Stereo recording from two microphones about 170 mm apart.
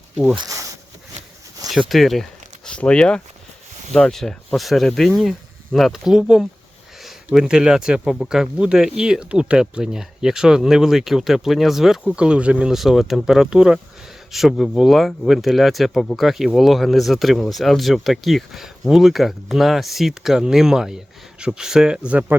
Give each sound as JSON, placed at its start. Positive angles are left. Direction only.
{"t": 0.3, "sound": "speech", "side_deg": -20}
{"t": 1.9, "sound": "speech", "side_deg": 0}